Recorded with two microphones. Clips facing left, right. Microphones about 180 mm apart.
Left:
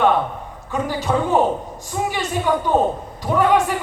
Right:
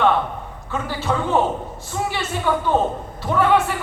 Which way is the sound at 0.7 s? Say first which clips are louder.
Left 3 dB; 15° left (ahead or behind).